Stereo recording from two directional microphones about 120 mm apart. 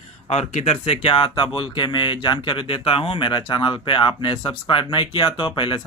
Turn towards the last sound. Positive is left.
turn(degrees=45)  # may be behind; listen again after turning